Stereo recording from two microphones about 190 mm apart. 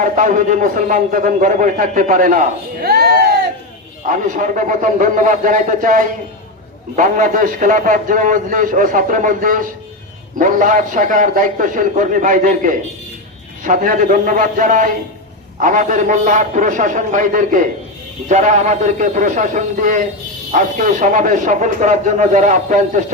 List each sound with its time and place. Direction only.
0.0 s a man's voice: 45° right (ahead or behind)
4.0 s a man's voice: 45° right (ahead or behind)